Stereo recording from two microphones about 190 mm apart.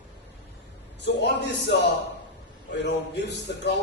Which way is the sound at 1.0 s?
65° left (ahead or behind).